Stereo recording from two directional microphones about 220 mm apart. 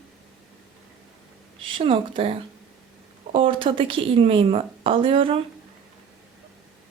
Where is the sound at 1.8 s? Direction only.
25° right (ahead or behind).